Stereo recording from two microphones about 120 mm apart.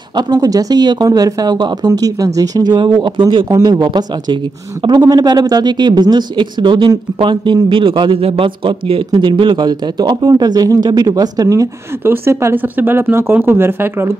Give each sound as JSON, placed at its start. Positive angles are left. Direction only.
{"t": 0.3, "sound": "a man's voice", "side_deg": -30}